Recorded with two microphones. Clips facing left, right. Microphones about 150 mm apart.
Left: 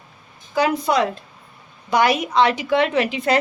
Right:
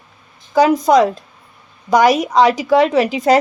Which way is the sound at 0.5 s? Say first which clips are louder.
Right 7 dB; 40° right (ahead or behind).